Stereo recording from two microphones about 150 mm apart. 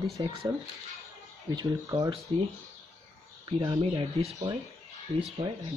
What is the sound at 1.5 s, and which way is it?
Speech, 25° right (ahead or behind).